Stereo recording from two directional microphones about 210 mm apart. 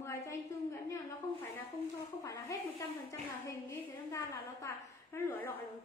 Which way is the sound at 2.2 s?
15° left (ahead or behind).